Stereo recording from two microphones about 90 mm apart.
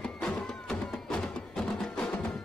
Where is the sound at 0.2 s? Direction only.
5° left (ahead or behind).